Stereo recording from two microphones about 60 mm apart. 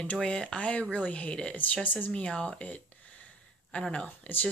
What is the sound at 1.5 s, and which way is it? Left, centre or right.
Speech, left.